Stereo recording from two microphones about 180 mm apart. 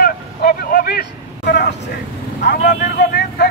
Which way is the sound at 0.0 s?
55° left (ahead or behind).